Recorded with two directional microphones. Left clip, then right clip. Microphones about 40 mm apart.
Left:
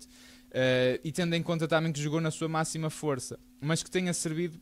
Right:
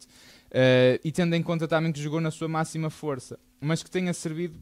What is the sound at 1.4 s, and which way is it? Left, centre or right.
Speech, right.